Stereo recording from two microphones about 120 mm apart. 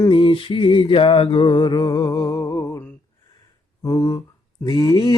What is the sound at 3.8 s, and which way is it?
Speech, 30° left (ahead or behind).